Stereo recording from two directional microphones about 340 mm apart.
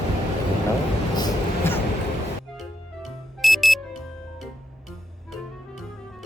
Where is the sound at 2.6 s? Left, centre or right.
Centre.